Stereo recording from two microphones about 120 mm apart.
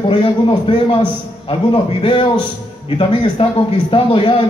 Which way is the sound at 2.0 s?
45° left (ahead or behind).